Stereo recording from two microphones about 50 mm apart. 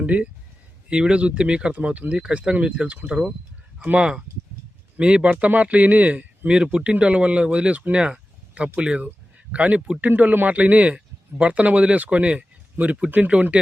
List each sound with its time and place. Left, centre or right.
0.0 s speech: right
13.1 s speech: right